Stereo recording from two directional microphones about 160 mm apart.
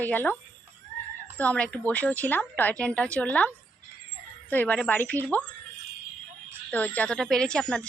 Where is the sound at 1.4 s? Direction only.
10° left (ahead or behind).